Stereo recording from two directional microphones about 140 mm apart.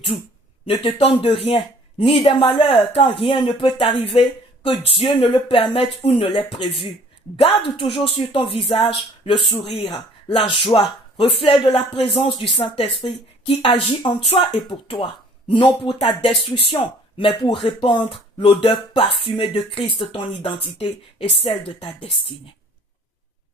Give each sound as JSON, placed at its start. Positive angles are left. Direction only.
{"t": 0.7, "sound": "speech", "side_deg": 45}